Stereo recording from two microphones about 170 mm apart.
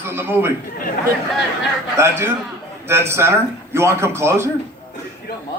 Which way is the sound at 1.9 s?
15° right (ahead or behind).